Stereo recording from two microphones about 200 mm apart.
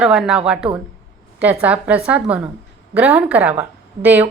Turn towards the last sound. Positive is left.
turn(degrees=-10)  # may be behind; listen again after turning